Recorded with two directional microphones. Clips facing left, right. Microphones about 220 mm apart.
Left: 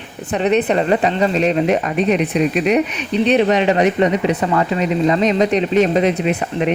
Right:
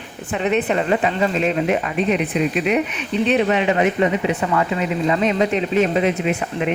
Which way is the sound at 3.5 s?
40° left (ahead or behind).